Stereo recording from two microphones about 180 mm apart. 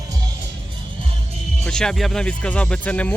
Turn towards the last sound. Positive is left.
turn(degrees=10)  # may be behind; listen again after turning